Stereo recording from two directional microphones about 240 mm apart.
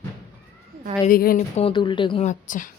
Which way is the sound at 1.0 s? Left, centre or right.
Left.